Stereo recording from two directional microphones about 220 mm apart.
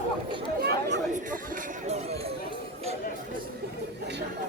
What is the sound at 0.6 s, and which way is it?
Chatter, 50° right (ahead or behind).